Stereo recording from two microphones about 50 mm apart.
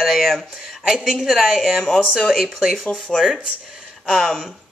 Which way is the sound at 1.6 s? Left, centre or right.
Centre.